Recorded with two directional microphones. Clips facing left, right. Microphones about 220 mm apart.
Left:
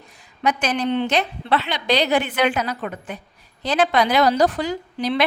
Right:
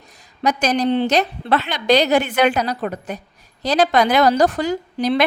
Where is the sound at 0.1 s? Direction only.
40° right (ahead or behind).